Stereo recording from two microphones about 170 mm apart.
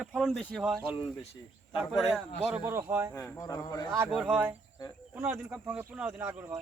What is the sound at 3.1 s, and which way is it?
Speech, 15° left (ahead or behind).